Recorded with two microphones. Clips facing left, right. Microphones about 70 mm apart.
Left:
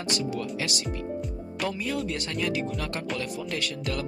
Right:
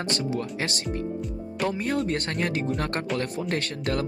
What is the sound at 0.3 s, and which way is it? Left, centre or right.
Speech, right.